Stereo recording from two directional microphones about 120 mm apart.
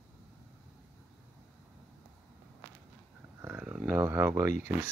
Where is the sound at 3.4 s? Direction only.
10° right (ahead or behind).